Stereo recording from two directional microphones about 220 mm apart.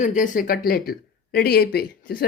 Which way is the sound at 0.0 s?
35° left (ahead or behind).